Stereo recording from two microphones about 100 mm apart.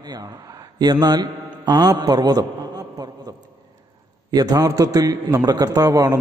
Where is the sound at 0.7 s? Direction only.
45° right (ahead or behind).